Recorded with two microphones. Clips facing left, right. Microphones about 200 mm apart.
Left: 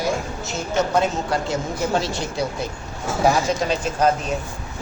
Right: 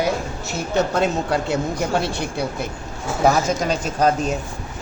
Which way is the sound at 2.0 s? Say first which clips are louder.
Right 1 dB; 60° right (ahead or behind).